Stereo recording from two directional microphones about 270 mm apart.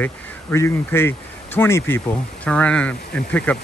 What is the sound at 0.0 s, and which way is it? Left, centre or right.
Speech, centre.